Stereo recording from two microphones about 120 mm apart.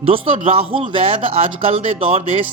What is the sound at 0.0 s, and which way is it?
Speech, 50° right (ahead or behind).